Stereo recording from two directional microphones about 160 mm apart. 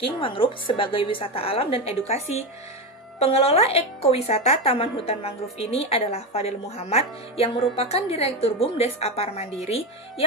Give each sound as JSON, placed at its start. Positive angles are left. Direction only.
{"t": 0.0, "sound": "a woman's voice", "side_deg": 35}